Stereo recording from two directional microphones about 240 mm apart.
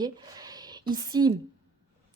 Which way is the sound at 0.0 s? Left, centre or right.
Centre.